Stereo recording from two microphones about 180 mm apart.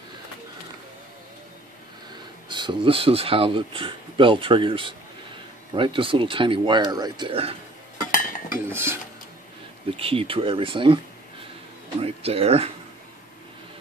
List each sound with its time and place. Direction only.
2.5 s speech: 25° right (ahead or behind)
8.1 s cutlery: 50° left (ahead or behind)
8.6 s speech: 15° right (ahead or behind)
9.9 s speech: 30° right (ahead or behind)
12.0 s speech: 35° right (ahead or behind)